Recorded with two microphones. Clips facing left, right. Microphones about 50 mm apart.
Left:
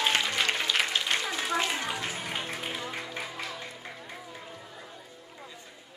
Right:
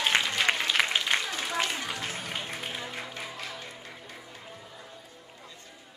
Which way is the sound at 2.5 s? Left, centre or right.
Centre.